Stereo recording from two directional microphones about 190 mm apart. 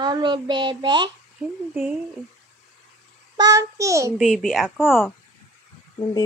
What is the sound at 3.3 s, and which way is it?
Speech, 20° right (ahead or behind).